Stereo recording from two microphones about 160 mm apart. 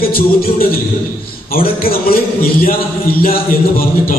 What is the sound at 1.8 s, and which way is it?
A man's voice, 65° left (ahead or behind).